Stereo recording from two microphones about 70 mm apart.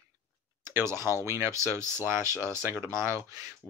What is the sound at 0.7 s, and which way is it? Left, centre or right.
Speech, right.